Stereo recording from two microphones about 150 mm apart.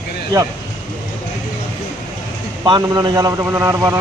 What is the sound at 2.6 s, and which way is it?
A man's voice, 30° right (ahead or behind).